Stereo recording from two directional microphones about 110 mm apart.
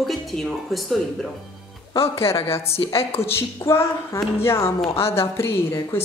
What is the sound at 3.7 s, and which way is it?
A woman's voice, 25° left (ahead or behind).